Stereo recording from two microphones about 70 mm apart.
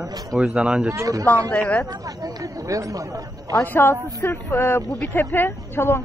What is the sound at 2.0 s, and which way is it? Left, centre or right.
Speech, right.